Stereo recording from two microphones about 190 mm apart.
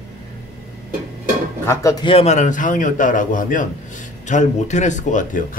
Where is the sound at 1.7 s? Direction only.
15° left (ahead or behind).